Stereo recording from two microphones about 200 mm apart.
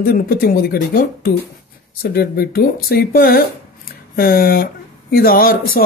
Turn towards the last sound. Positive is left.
turn(degrees=50)  # may be behind; listen again after turning